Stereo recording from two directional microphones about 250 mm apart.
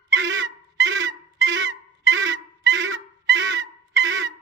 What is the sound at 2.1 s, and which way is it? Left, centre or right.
Goose, right.